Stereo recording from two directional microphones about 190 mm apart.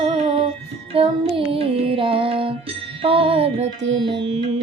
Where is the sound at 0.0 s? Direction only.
30° right (ahead or behind).